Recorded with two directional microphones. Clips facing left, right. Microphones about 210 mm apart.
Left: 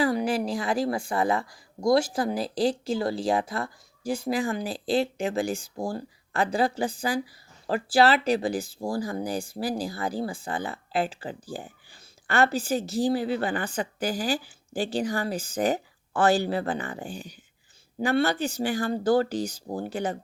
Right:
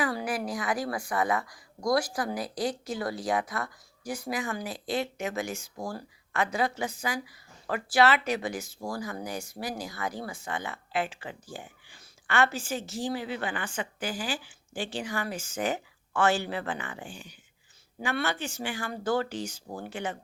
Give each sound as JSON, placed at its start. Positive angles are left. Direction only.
{"t": 0.0, "sound": "speech", "side_deg": 25}